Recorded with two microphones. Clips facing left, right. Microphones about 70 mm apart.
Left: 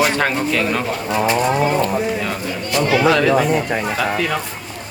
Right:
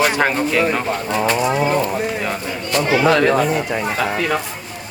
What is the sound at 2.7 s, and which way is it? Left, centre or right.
Speech, right.